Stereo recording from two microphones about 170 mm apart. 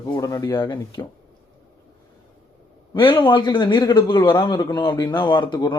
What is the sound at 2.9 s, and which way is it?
A man's voice, 30° left (ahead or behind).